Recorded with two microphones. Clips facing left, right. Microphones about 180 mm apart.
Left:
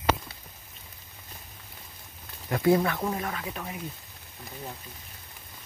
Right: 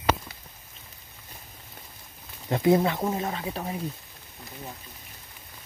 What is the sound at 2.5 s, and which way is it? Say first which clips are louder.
Speech: right 2 dB; 25° right (ahead or behind).